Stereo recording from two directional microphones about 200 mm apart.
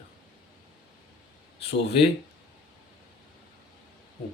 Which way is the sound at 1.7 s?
30° left (ahead or behind).